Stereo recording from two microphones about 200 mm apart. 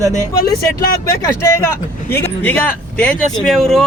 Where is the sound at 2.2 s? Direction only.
10° left (ahead or behind).